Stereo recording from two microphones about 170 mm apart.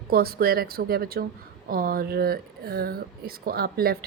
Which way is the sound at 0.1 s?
65° right (ahead or behind).